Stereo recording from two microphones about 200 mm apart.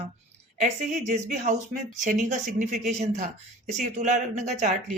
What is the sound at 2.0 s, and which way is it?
Speech, 40° right (ahead or behind).